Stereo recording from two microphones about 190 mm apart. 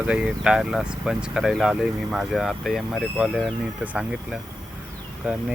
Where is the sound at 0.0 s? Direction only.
5° right (ahead or behind).